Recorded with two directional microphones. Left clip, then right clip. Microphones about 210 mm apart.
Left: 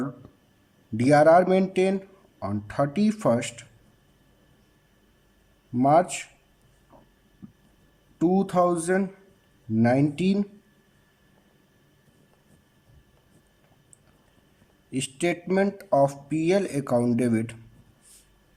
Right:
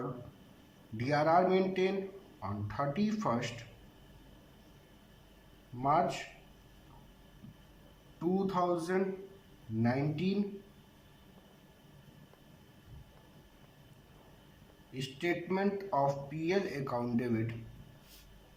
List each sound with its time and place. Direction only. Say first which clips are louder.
0.9 s speech: left 12 dB; 50° left (ahead or behind)
5.8 s speech: left 10 dB; 55° left (ahead or behind)
8.2 s speech: left 11 dB; 55° left (ahead or behind)
14.9 s speech: left 8 dB; 55° left (ahead or behind)